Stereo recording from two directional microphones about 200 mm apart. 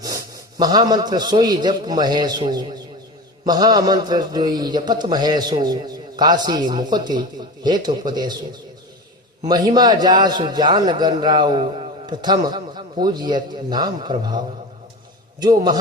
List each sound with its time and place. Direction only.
0.6 s a man's voice: 20° right (ahead or behind)
9.5 s a man's voice: 20° right (ahead or behind)